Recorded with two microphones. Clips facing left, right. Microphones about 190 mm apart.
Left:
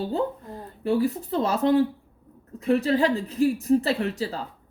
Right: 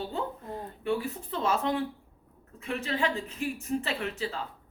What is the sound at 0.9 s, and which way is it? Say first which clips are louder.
Speech: left 8 dB; 35° left (ahead or behind).